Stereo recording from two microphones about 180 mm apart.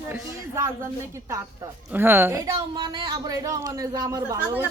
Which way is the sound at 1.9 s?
10° right (ahead or behind).